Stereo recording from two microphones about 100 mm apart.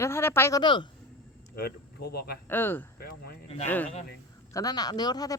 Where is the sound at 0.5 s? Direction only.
50° left (ahead or behind).